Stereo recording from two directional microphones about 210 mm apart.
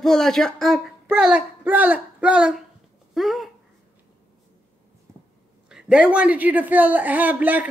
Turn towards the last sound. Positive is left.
turn(degrees=-10)  # may be behind; listen again after turning